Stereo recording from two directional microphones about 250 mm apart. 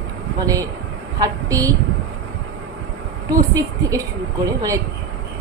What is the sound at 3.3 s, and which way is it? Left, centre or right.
Speech, centre.